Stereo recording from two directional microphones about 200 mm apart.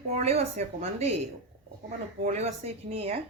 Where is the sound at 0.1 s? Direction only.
30° right (ahead or behind).